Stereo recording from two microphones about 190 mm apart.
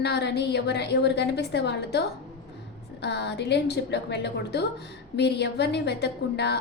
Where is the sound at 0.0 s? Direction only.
60° left (ahead or behind).